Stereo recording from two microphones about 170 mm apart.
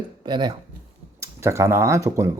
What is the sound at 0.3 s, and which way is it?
Speech, 25° right (ahead or behind).